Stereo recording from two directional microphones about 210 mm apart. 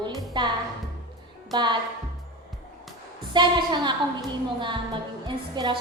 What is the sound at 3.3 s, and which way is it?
Speech, 20° right (ahead or behind).